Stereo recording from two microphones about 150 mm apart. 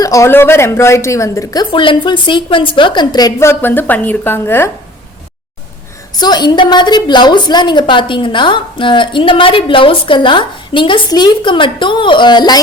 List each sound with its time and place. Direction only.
0.0 s a woman's voice: 20° left (ahead or behind)
6.1 s a woman's voice: 30° left (ahead or behind)